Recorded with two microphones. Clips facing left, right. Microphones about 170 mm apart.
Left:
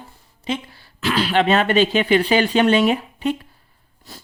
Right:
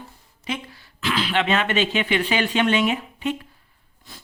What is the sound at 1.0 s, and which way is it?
Speech, 40° left (ahead or behind).